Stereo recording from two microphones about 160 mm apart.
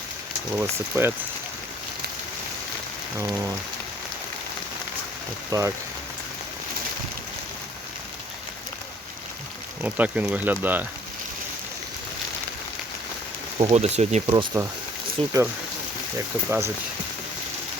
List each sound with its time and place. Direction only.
0.5 s speech: 15° right (ahead or behind)
5.5 s speech: 20° right (ahead or behind)
9.8 s speech: 10° right (ahead or behind)
13.6 s speech: 40° right (ahead or behind)
16.5 s speech: 15° right (ahead or behind)